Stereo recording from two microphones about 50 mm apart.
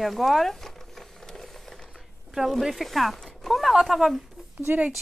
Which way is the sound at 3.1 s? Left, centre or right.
Centre.